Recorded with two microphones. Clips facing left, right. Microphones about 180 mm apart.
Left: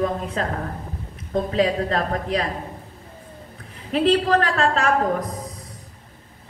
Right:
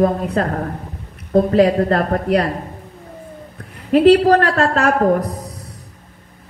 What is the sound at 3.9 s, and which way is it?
Speech, 40° right (ahead or behind).